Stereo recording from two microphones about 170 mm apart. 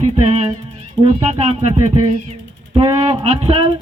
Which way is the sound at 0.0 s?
40° right (ahead or behind).